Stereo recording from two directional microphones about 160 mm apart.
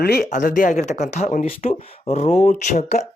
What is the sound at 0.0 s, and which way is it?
Speech, 75° left (ahead or behind).